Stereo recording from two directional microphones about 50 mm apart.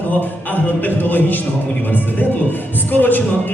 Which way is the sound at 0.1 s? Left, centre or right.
Left.